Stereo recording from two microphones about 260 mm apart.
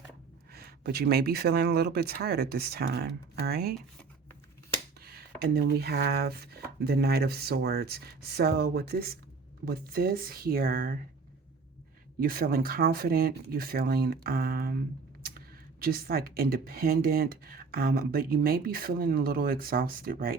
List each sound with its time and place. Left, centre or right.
0.5 s speech: right
4.9 s speech: right
12.2 s speech: right